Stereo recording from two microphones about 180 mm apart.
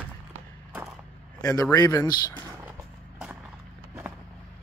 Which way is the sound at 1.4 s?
20° left (ahead or behind).